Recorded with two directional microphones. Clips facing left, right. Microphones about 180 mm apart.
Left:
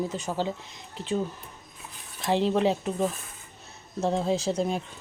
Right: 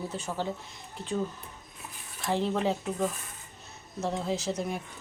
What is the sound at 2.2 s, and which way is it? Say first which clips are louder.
Speech: left 4 dB; 20° left (ahead or behind).